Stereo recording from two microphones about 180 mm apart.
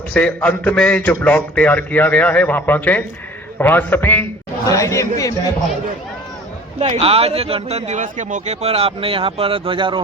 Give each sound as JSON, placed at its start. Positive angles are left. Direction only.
{"t": 0.1, "sound": "a man's voice", "side_deg": 5}
{"t": 6.7, "sound": "a man's voice", "side_deg": -35}